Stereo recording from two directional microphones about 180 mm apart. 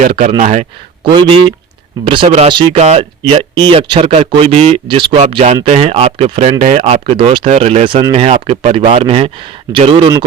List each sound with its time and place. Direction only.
0.1 s speech: 35° right (ahead or behind)
1.1 s speech: 30° right (ahead or behind)